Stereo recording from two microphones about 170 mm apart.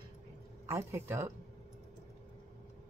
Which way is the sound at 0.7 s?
15° right (ahead or behind).